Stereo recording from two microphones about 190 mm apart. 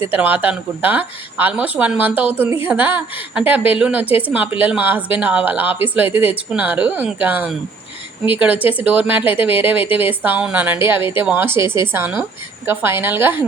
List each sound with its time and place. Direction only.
0.0 s speech: 10° right (ahead or behind)